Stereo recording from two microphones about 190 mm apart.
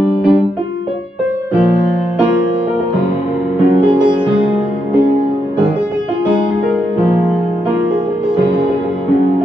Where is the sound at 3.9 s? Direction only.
5° right (ahead or behind).